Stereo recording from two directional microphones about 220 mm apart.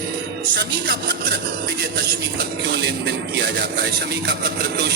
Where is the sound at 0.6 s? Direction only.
45° right (ahead or behind).